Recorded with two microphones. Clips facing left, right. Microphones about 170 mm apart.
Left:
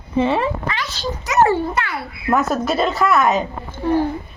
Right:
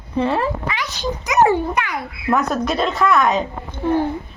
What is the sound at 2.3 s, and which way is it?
A woman's voice, 5° left (ahead or behind).